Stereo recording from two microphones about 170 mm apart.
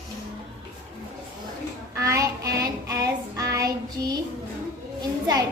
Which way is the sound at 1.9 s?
20° right (ahead or behind).